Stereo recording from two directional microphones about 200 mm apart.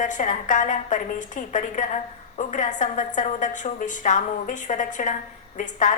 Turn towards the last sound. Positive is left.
turn(degrees=40)  # may be behind; listen again after turning